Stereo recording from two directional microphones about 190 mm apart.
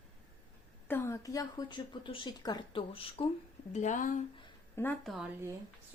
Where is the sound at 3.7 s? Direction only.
40° left (ahead or behind).